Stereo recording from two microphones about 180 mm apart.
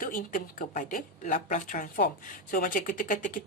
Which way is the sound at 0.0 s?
45° left (ahead or behind).